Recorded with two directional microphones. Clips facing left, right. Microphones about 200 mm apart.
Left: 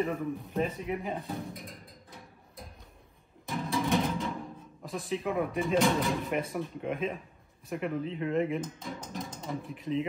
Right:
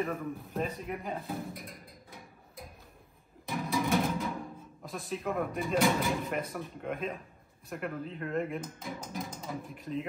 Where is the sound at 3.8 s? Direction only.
5° right (ahead or behind).